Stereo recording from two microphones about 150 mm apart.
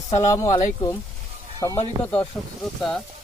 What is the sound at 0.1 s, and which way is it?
Speech, 50° left (ahead or behind).